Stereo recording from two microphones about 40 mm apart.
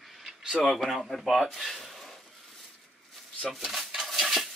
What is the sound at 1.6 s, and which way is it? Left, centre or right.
Frying, centre.